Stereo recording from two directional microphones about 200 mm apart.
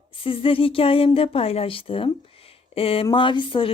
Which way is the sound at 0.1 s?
25° left (ahead or behind).